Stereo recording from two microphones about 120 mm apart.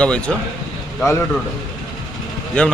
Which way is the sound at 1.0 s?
25° left (ahead or behind).